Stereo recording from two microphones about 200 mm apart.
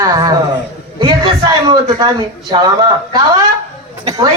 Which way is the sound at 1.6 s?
20° right (ahead or behind).